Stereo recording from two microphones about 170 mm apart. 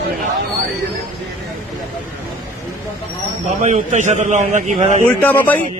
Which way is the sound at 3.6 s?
45° right (ahead or behind).